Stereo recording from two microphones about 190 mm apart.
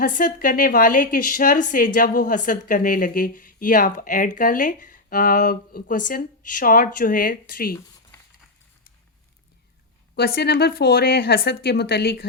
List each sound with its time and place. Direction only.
0.0 s a woman's voice: 45° left (ahead or behind)
10.2 s speech: 60° left (ahead or behind)